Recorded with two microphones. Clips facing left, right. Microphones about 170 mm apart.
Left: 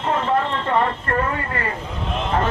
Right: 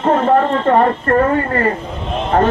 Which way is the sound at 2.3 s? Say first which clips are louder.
Right 8 dB; 50° right (ahead or behind).